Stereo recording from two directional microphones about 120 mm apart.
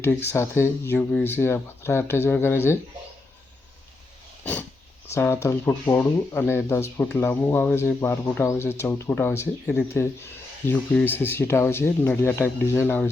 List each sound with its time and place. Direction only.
0.0 s speech: 20° left (ahead or behind)
5.0 s speech: 20° left (ahead or behind)